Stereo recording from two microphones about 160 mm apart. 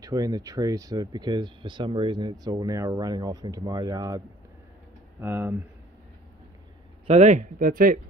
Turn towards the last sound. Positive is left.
turn(degrees=-60)  # may be behind; listen again after turning